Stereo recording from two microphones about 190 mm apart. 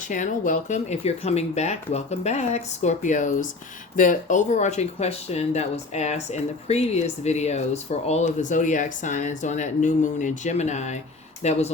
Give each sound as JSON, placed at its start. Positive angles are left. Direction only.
{"t": 0.1, "sound": "speech", "side_deg": 40}